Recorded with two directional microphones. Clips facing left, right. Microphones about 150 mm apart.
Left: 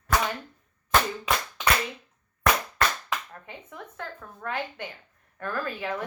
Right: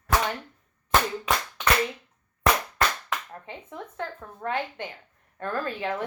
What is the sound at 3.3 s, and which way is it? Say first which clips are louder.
A woman's voice: right 3 dB; 25° right (ahead or behind).